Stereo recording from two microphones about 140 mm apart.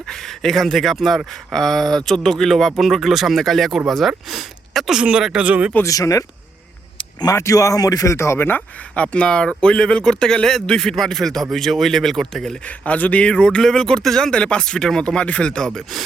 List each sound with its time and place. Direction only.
0.1 s speech: 5° left (ahead or behind)
5.7 s speech: 25° left (ahead or behind)
7.0 s a sound: 30° left (ahead or behind)
7.3 s speech: 25° left (ahead or behind); by 16.0 s centre (ahead or behind)